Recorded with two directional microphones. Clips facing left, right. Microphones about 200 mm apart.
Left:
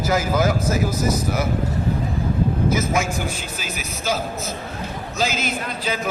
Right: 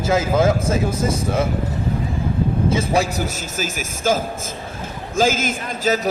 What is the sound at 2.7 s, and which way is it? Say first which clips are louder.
A man's voice: right 2 dB; 30° right (ahead or behind).